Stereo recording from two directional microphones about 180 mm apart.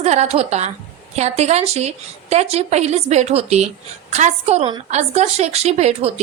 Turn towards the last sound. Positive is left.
turn(degrees=-35)  # may be behind; listen again after turning